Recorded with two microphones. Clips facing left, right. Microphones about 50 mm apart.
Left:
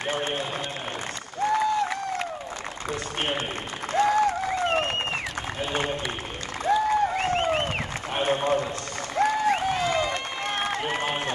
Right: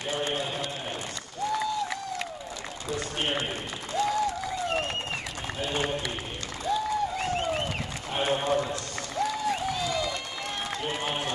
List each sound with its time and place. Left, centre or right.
1.4 s applause: left
2.9 s a sound: left
3.9 s applause: left
6.6 s applause: left